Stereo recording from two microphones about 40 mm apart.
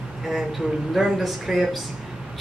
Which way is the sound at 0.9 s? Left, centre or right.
Centre.